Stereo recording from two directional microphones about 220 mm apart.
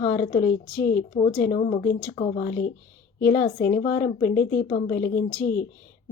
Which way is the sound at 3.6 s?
45° left (ahead or behind).